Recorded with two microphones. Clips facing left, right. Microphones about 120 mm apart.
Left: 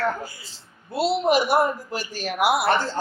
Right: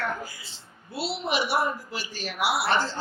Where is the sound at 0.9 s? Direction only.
45° left (ahead or behind).